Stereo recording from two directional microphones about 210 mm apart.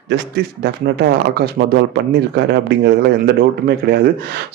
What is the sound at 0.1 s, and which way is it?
Speech, 50° right (ahead or behind).